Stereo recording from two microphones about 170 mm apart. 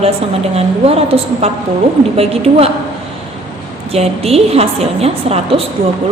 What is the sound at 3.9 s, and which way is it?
A woman's voice, 35° right (ahead or behind).